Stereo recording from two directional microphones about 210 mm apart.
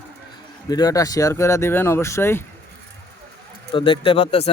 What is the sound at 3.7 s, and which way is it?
Speech, 25° left (ahead or behind).